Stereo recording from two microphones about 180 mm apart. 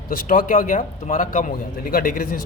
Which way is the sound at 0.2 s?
50° left (ahead or behind).